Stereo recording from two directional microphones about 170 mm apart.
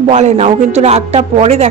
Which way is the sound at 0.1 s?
45° right (ahead or behind).